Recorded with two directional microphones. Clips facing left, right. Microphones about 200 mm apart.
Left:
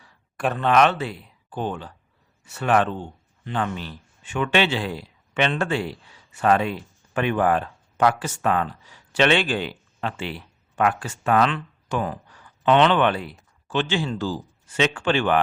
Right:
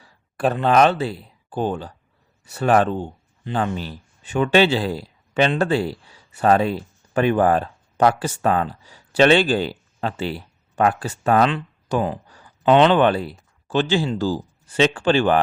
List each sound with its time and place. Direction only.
0.0 s speech: 35° right (ahead or behind)